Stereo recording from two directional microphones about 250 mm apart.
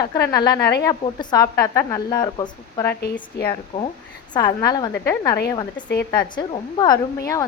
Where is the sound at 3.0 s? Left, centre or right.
Left.